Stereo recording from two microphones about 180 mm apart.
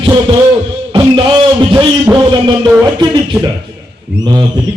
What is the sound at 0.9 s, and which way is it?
A man's voice, 25° right (ahead or behind).